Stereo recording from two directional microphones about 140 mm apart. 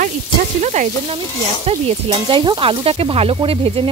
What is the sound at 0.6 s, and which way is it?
Frying, 55° right (ahead or behind).